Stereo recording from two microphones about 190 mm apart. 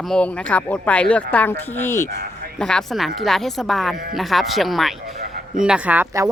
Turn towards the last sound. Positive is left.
turn(degrees=-10)  # may be behind; listen again after turning